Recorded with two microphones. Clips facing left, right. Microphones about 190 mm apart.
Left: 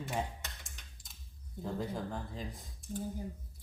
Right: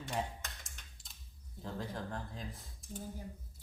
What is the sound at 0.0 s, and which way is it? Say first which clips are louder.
Tick-tock: left 1 dB; centre (ahead or behind).